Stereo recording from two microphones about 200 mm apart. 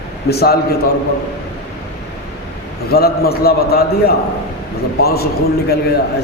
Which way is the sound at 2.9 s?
50° left (ahead or behind).